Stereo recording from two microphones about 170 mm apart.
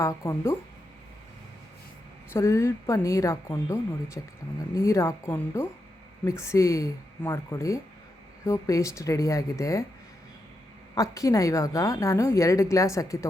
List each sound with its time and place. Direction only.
0.0 s a woman's voice: 20° left (ahead or behind)
2.3 s a woman's voice: 15° left (ahead or behind)
10.9 s a woman's voice: 20° left (ahead or behind)